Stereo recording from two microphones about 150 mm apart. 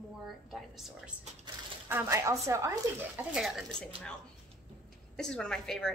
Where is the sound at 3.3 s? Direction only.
Centre (ahead or behind).